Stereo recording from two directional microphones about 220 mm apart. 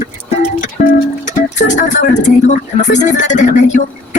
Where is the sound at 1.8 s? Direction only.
35° left (ahead or behind).